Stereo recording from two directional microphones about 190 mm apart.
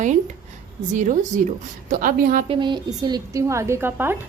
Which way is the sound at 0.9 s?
40° right (ahead or behind).